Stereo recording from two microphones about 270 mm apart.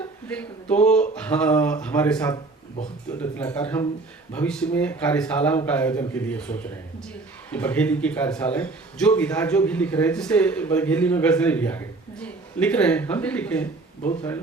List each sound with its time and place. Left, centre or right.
0.3 s a man's voice: centre
14.0 s speech: left